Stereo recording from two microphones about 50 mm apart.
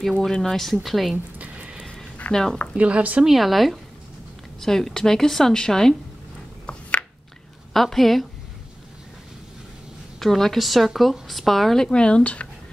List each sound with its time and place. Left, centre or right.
0.2 s speech: centre
1.1 s a sound: right
2.3 s a woman's voice: centre
2.8 s speech: right
3.3 s a woman's voice: centre
6.6 s a sound: left
7.7 s speech: centre
10.1 s speech: centre
11.9 s speech: left